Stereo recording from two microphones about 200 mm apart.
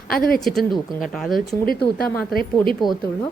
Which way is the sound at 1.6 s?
45° left (ahead or behind).